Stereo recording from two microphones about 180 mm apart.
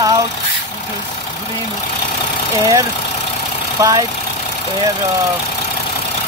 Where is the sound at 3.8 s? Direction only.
20° right (ahead or behind).